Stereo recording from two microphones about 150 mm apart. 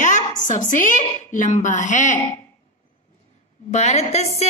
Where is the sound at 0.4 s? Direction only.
55° left (ahead or behind).